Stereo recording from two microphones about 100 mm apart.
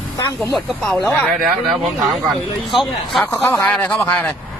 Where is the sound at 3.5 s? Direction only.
5° left (ahead or behind).